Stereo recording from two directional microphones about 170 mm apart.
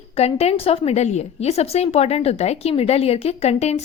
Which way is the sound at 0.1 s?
35° left (ahead or behind).